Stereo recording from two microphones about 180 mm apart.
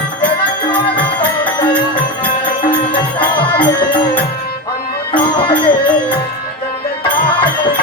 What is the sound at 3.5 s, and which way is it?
Music, 25° left (ahead or behind).